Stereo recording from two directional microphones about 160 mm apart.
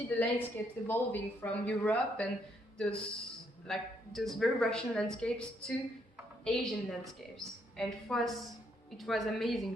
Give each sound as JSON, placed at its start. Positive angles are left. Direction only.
{"t": 0.1, "sound": "a woman's voice", "side_deg": 10}